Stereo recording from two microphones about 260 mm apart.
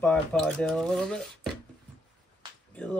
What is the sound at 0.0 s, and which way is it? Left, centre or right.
Speech, centre.